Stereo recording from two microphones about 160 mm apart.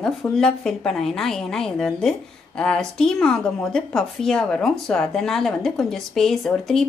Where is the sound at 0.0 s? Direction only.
5° left (ahead or behind).